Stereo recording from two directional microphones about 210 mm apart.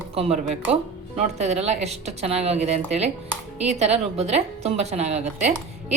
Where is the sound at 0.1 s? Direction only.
30° right (ahead or behind).